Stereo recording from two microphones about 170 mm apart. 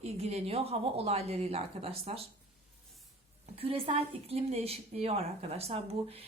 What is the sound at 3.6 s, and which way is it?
Speech, 35° right (ahead or behind).